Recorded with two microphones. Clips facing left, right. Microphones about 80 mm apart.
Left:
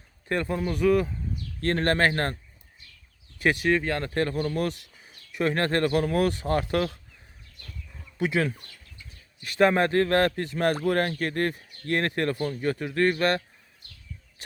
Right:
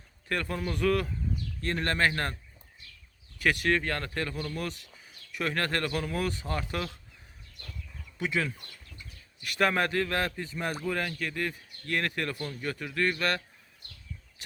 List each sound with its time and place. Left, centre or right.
0.3 s a man's voice: left
0.6 s speech: centre
1.6 s speech: left
3.3 s speech: left
3.6 s speech: centre
4.0 s speech: left
5.0 s speech: left
8.2 s speech: left
9.4 s speech: left